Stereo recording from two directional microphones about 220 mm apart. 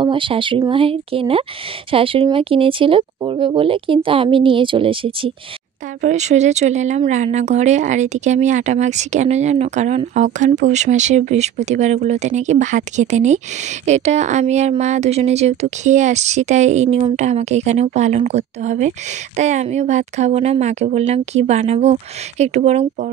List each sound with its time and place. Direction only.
0.0 s speech: 25° right (ahead or behind)